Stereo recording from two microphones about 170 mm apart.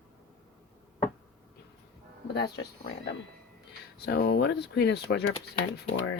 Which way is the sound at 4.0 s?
75° left (ahead or behind).